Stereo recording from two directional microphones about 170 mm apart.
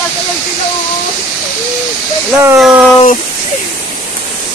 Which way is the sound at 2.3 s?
15° right (ahead or behind).